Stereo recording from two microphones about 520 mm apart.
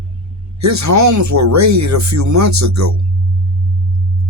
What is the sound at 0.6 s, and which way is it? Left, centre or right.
Speech, right.